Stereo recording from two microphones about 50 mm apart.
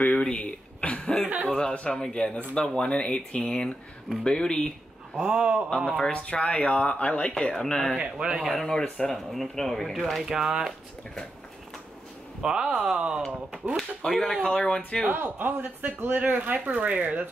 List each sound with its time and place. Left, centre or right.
0.1 s a sound: left
1.2 s a sound: right
1.5 s speech: left
5.2 s a sound: right
5.9 s speech: centre
10.2 s speech: centre
12.4 s speech: centre
13.7 s speech: centre
14.4 s speech: centre
15.0 s speech: right